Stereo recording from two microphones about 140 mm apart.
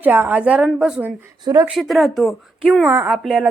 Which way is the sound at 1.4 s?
30° right (ahead or behind).